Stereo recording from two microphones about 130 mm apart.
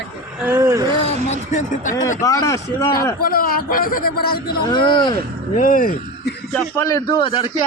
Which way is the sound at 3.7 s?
90° left.